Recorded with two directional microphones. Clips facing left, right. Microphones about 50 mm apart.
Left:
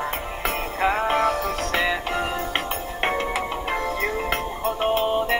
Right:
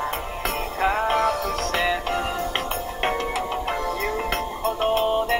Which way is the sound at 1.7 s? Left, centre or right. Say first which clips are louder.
Even; centre.